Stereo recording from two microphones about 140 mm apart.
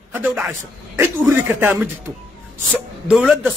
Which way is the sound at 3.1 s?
10° right (ahead or behind).